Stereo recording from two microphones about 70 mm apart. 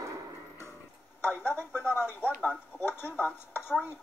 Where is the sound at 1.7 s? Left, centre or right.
Left.